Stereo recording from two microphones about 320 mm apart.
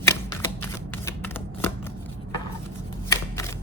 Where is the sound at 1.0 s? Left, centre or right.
Centre.